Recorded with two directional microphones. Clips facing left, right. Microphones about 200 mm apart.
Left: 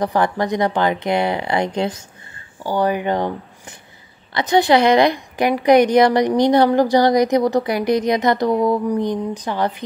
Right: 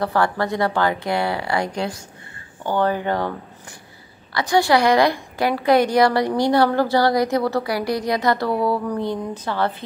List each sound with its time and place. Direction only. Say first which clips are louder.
0.0 s a woman's voice: left 2 dB; 15° left (ahead or behind)